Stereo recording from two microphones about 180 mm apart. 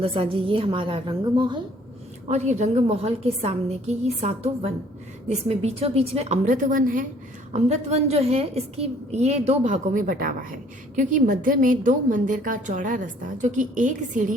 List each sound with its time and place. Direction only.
0.0 s a woman's voice: 30° right (ahead or behind)
2.2 s a woman's voice: 40° right (ahead or behind)
7.5 s a woman's voice: 40° right (ahead or behind)